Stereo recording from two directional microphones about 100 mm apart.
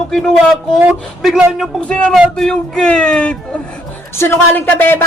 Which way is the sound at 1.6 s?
10° left (ahead or behind).